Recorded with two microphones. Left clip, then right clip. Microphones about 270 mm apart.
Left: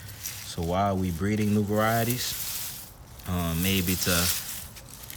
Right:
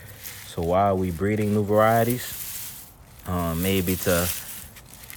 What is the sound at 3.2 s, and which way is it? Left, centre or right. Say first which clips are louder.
Speech: right 4 dB; centre.